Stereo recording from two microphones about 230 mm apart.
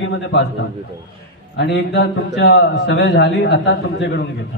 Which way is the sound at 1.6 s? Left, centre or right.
Left.